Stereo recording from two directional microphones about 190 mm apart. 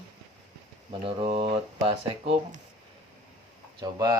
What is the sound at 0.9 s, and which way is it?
Speech, 25° right (ahead or behind).